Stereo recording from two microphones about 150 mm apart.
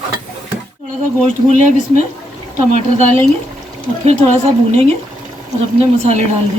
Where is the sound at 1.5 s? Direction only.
55° right (ahead or behind).